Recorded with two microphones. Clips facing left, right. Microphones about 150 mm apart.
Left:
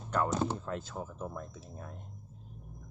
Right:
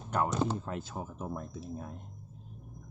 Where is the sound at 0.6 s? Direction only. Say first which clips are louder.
Even; 15° right (ahead or behind).